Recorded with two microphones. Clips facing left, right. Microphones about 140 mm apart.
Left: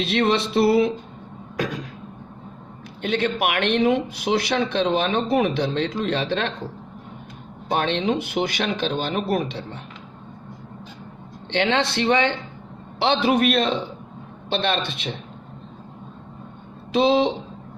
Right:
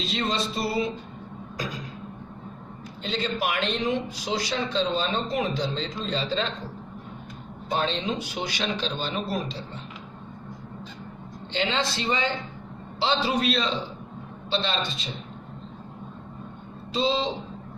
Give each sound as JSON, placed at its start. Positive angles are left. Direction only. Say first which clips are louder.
{"t": 0.0, "sound": "a sound", "louder": "left 7 dB", "side_deg": 70}
{"t": 1.5, "sound": "throat clearing", "louder": "left 7 dB", "side_deg": 65}
{"t": 3.0, "sound": "speech", "louder": "left 6 dB", "side_deg": 65}
{"t": 7.7, "sound": "speech", "louder": "left 5 dB", "side_deg": 65}
{"t": 11.5, "sound": "speech", "louder": "left 6 dB", "side_deg": 65}
{"t": 16.9, "sound": "speech", "louder": "left 7 dB", "side_deg": 65}